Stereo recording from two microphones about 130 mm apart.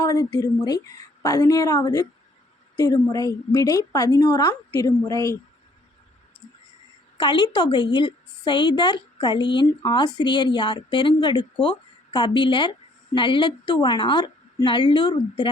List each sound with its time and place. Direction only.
0.0 s a woman's voice: 25° left (ahead or behind)
7.2 s a woman's voice: 35° left (ahead or behind)